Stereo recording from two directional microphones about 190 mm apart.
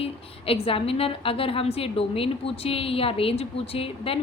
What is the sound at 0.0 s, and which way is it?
A woman's voice, 30° left (ahead or behind).